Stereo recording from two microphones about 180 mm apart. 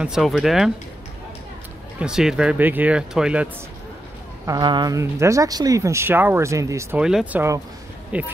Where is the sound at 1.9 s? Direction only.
5° right (ahead or behind).